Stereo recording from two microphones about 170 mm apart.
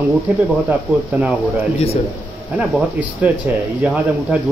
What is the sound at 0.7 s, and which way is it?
Speech, 5° right (ahead or behind).